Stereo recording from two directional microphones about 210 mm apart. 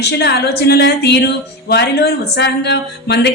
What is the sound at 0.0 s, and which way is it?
A woman's voice, 50° left (ahead or behind).